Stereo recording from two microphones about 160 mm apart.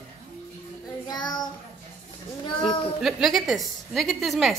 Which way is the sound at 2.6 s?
Centre (ahead or behind).